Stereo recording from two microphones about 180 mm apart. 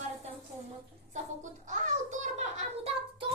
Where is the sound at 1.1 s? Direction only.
45° right (ahead or behind).